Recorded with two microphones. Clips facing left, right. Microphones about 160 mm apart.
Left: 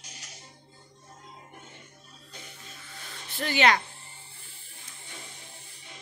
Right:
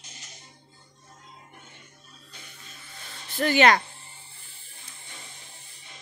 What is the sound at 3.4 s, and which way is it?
Speech, 50° right (ahead or behind).